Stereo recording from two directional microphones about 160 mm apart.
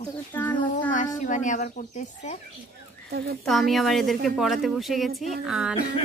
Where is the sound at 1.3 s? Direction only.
50° left (ahead or behind).